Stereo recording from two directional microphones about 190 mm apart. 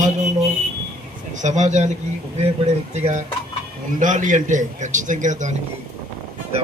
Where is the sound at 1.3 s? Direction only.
40° right (ahead or behind).